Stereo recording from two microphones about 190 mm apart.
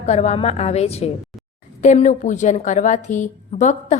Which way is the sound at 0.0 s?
35° left (ahead or behind).